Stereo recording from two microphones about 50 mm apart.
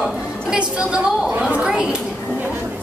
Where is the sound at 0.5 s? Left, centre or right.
Centre.